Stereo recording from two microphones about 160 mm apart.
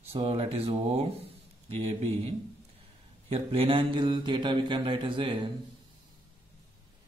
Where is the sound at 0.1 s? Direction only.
35° right (ahead or behind).